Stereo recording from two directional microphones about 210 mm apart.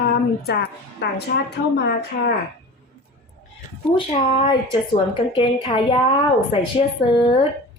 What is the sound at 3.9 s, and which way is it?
A woman's voice, 25° left (ahead or behind).